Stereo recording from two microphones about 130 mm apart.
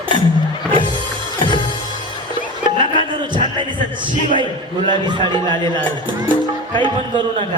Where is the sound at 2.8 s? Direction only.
40° right (ahead or behind).